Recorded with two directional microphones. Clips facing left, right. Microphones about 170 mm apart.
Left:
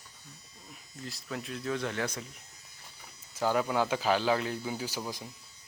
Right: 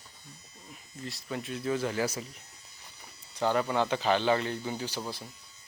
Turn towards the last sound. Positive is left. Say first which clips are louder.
# even
turn(degrees=10)  # may be behind; listen again after turning